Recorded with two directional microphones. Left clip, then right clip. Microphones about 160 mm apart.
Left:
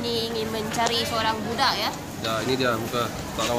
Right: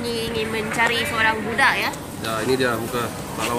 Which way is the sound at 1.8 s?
10° left (ahead or behind).